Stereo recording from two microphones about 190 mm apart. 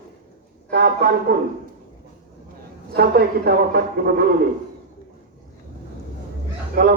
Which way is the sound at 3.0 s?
55° right (ahead or behind).